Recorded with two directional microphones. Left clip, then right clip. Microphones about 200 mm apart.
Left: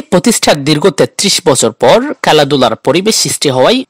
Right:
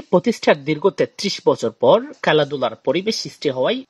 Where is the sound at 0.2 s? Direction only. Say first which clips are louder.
Left 7 dB; 50° left (ahead or behind).